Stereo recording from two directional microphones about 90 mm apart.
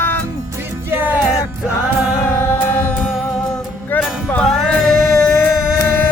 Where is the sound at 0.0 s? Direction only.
20° left (ahead or behind).